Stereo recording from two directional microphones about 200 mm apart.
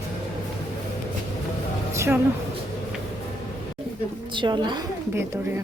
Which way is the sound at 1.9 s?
10° right (ahead or behind).